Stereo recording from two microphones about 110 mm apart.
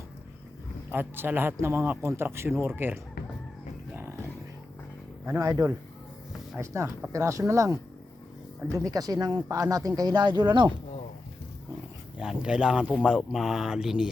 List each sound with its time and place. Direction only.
0.9 s speech: 20° right (ahead or behind)
5.4 s speech: 30° right (ahead or behind); by 10.8 s 45° right (ahead or behind)
12.1 s speech: 5° right (ahead or behind)